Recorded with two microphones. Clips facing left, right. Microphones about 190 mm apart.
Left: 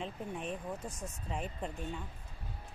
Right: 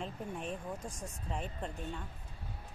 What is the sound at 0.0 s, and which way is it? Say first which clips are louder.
Speech: left 1 dB; centre (ahead or behind).